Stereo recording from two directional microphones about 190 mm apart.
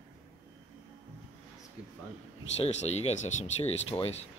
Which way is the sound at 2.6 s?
35° left (ahead or behind).